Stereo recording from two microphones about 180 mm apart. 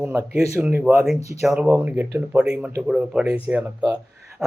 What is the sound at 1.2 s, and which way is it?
Speech, 40° left (ahead or behind).